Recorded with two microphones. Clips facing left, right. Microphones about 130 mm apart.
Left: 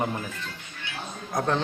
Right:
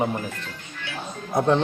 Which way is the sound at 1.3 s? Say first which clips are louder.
Right 6 dB; 25° right (ahead or behind).